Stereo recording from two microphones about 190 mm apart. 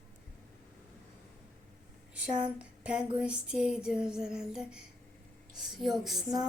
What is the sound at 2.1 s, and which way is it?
Speech, 5° right (ahead or behind).